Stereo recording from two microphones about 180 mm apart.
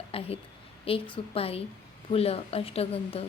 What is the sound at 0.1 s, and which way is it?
A woman's voice, 35° left (ahead or behind).